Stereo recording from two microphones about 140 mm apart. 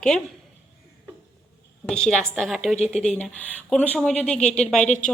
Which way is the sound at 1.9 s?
5° left (ahead or behind).